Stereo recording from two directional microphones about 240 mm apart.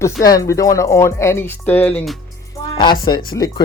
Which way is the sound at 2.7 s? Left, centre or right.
Centre.